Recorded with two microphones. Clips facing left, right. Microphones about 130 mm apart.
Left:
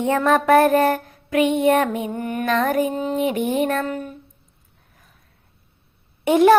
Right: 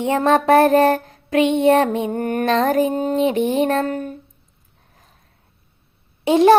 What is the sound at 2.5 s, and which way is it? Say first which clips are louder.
Music: right 2 dB; 30° right (ahead or behind).